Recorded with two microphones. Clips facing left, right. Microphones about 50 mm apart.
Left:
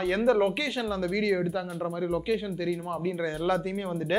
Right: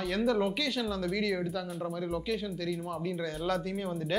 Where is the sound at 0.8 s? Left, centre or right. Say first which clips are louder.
Left 3 dB; centre.